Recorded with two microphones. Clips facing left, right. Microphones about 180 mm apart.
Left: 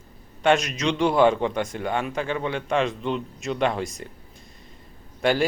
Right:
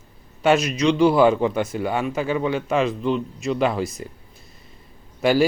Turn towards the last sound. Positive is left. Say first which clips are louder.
# right 4 dB
turn(degrees=-5)  # may be behind; listen again after turning